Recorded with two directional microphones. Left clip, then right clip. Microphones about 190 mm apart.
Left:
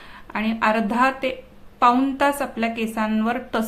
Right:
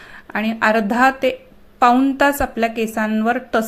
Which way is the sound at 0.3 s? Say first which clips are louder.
Right 4 dB; 25° right (ahead or behind).